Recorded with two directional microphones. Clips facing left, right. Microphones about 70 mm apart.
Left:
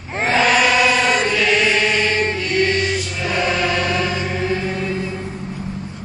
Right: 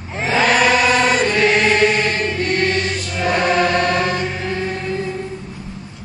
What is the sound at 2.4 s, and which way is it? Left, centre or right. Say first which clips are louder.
Choir: even; right.